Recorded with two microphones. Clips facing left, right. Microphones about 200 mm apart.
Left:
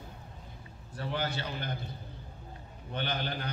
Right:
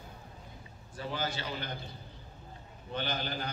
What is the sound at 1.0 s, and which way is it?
Speech, 60° left (ahead or behind).